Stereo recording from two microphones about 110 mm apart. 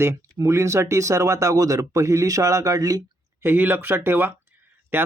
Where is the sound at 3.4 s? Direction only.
20° right (ahead or behind).